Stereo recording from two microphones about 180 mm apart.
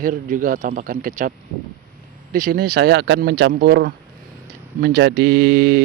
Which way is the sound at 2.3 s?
50° right (ahead or behind).